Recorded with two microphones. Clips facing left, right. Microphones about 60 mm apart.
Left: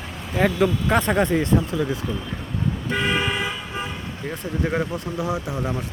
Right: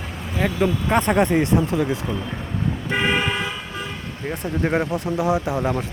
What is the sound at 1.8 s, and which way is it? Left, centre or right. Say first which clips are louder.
Speech: right 2 dB; centre.